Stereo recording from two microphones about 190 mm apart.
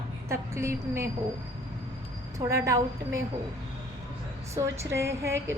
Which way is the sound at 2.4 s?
15° right (ahead or behind).